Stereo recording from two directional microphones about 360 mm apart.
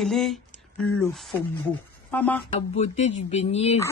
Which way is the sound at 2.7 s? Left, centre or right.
Centre.